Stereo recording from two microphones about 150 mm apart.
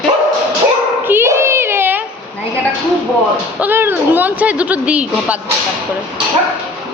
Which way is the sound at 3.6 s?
15° right (ahead or behind).